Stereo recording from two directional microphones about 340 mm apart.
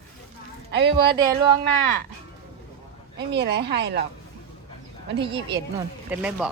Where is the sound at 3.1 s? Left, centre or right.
Right.